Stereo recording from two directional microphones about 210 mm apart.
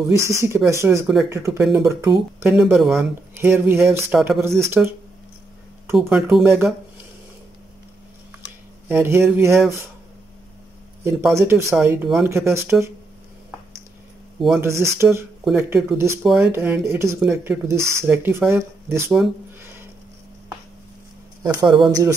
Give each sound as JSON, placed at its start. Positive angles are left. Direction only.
{"t": 0.1, "sound": "speech", "side_deg": -15}
{"t": 5.9, "sound": "speech", "side_deg": -5}
{"t": 8.8, "sound": "speech", "side_deg": -10}
{"t": 11.3, "sound": "speech", "side_deg": -10}
{"t": 14.6, "sound": "speech", "side_deg": -10}
{"t": 19.1, "sound": "a sound", "side_deg": -10}
{"t": 21.4, "sound": "speech", "side_deg": -20}